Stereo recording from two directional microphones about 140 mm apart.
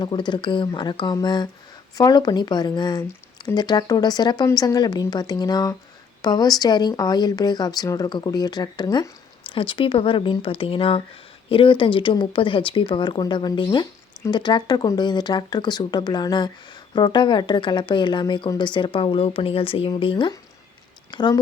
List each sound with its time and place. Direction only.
0.0 s speech: 30° left (ahead or behind)